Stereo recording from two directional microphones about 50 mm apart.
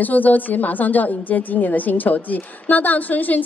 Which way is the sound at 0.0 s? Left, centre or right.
Left.